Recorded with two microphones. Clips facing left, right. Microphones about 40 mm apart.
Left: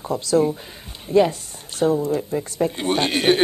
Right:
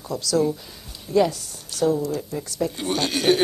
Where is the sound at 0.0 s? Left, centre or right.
Left.